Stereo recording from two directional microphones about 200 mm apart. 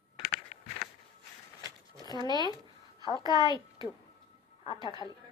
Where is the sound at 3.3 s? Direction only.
20° left (ahead or behind).